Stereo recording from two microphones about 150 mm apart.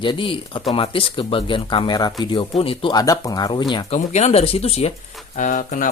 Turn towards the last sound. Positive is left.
turn(degrees=60)  # may be behind; listen again after turning